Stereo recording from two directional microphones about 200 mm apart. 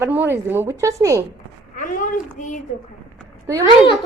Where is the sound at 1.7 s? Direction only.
40° left (ahead or behind).